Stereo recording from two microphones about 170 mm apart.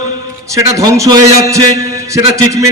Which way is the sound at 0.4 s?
20° right (ahead or behind).